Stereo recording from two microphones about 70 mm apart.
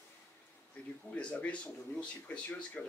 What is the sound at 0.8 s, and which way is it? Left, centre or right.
Speech, centre.